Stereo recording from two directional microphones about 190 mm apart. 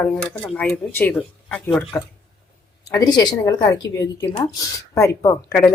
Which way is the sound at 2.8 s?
20° left (ahead or behind).